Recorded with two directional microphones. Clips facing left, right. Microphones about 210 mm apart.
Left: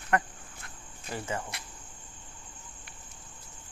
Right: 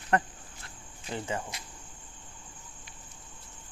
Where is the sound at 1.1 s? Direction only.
20° right (ahead or behind).